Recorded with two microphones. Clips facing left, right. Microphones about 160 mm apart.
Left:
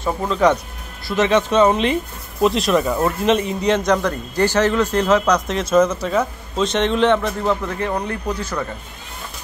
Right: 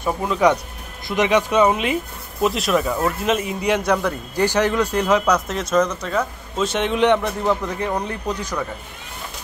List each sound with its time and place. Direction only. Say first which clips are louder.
0.0 s a man's voice: left 1 dB; 10° right (ahead or behind); by 6.2 s 5° left (ahead or behind)
6.6 s a man's voice: left 2 dB; 10° right (ahead or behind)